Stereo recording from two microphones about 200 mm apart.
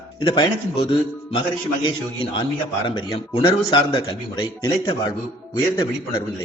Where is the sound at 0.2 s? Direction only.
25° left (ahead or behind).